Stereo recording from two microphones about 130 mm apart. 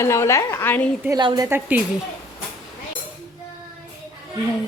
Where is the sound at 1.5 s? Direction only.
15° right (ahead or behind).